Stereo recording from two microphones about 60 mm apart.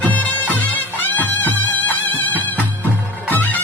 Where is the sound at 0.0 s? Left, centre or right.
Left.